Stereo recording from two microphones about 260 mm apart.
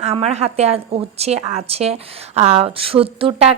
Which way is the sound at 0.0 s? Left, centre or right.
Right.